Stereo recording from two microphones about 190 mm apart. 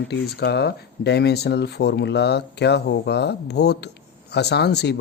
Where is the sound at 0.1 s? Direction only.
60° left (ahead or behind).